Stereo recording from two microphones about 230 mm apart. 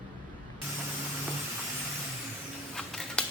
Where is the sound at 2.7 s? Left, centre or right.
Centre.